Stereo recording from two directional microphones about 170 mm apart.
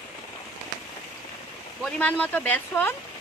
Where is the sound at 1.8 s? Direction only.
5° left (ahead or behind).